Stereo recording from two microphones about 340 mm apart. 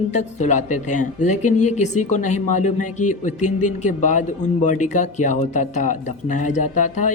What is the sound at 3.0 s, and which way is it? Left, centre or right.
Speech, left.